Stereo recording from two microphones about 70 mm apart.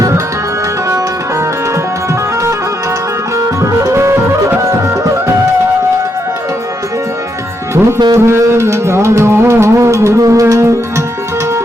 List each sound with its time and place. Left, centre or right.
3.3 s music: right
8.1 s music: right